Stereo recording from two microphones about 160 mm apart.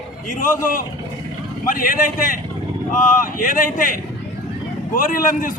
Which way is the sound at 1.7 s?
60° left (ahead or behind).